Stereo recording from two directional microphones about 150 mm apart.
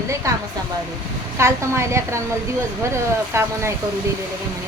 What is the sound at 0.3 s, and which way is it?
A woman's voice, 20° right (ahead or behind).